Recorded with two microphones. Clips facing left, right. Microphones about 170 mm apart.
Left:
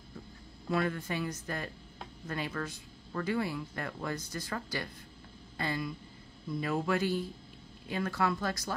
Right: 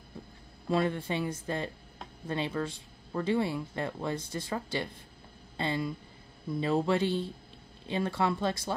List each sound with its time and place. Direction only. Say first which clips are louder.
0.7 s speech: right 3 dB; 25° right (ahead or behind)